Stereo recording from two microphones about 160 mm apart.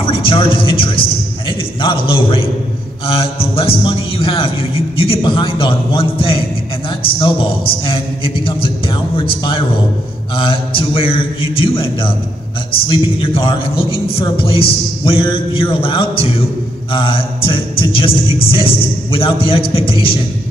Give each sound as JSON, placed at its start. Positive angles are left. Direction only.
{"t": 0.0, "sound": "a man's voice", "side_deg": 35}
{"t": 7.8, "sound": "a man's voice", "side_deg": 35}